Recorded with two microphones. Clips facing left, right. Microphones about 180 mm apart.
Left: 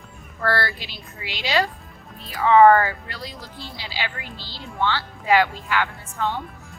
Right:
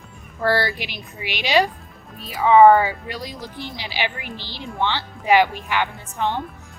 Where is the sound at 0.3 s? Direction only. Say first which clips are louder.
Right 3 dB; 15° right (ahead or behind).